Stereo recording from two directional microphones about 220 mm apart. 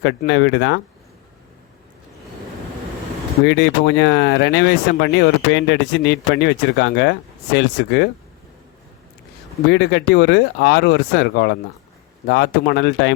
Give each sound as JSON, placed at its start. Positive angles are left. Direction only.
{"t": 0.3, "sound": "speech", "side_deg": 55}
{"t": 3.4, "sound": "speech", "side_deg": 50}
{"t": 9.6, "sound": "speech", "side_deg": 50}